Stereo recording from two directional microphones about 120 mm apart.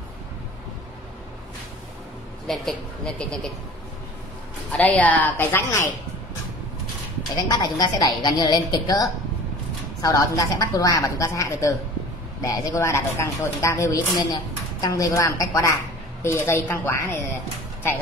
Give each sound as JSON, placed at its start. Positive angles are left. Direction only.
{"t": 2.4, "sound": "a woman's voice", "side_deg": 5}
{"t": 4.7, "sound": "a woman's voice", "side_deg": 15}
{"t": 7.4, "sound": "a woman's voice", "side_deg": 35}